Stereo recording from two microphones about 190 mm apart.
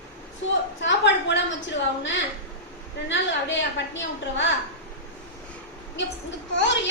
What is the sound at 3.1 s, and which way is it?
A woman's voice, 75° left (ahead or behind).